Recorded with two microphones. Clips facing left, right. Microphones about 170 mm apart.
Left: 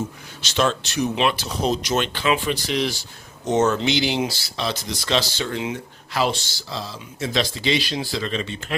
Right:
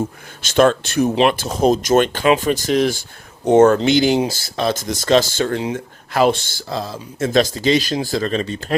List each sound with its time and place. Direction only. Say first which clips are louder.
0.4 s speech: right 8 dB; 50° right (ahead or behind)